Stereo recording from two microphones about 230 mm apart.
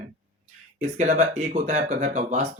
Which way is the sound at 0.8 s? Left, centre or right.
Right.